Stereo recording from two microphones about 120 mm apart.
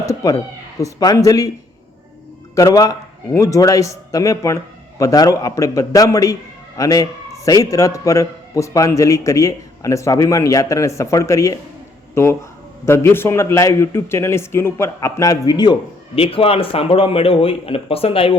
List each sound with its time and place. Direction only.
0.0 s speech: 30° left (ahead or behind)
2.6 s a man's voice: 30° left (ahead or behind)
16.1 s a man's voice: 50° left (ahead or behind)